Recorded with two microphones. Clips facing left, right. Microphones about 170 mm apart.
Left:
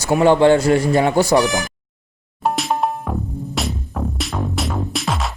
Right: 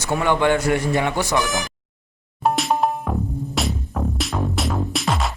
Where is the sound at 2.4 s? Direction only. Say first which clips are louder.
Even; centre (ahead or behind).